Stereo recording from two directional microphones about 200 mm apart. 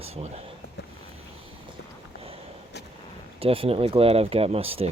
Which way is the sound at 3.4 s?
30° right (ahead or behind).